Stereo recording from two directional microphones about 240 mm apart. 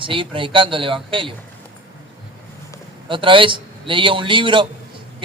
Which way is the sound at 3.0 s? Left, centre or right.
Right.